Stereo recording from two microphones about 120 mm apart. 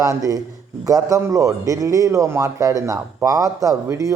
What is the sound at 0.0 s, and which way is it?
A man's voice, 30° right (ahead or behind).